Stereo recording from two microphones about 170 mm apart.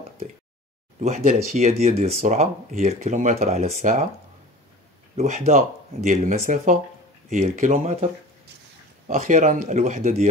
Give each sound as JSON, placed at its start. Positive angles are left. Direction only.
{"t": 1.0, "sound": "speech", "side_deg": -45}
{"t": 5.1, "sound": "speech", "side_deg": -40}
{"t": 9.0, "sound": "speech", "side_deg": -50}